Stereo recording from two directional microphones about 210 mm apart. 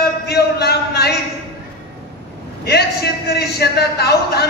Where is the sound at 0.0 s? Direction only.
50° left (ahead or behind).